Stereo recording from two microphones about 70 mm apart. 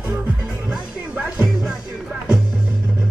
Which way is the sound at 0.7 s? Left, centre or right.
Centre.